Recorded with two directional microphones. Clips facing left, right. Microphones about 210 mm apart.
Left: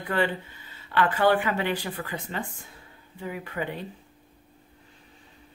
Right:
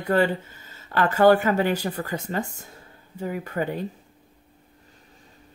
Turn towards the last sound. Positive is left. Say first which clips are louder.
# right 5 dB
turn(degrees=-45)  # may be behind; listen again after turning